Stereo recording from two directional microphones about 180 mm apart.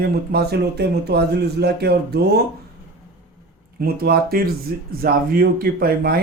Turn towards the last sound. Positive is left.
turn(degrees=-55)  # may be behind; listen again after turning